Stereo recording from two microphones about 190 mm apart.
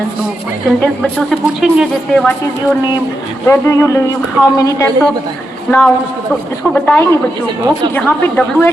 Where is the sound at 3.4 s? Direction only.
15° left (ahead or behind).